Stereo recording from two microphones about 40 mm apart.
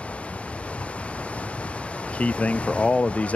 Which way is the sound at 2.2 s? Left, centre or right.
Left.